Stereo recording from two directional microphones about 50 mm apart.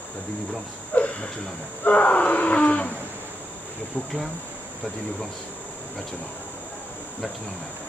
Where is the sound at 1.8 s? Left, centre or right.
Left.